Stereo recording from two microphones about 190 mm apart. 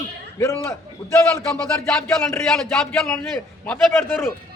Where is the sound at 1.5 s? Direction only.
5° left (ahead or behind).